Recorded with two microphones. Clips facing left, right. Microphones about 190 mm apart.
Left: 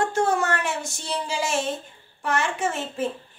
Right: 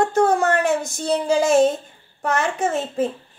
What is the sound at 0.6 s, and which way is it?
A woman's voice, 55° right (ahead or behind).